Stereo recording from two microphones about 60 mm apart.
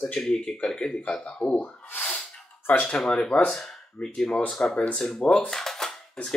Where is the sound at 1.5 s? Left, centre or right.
Left.